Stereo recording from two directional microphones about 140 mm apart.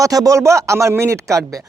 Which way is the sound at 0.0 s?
25° right (ahead or behind).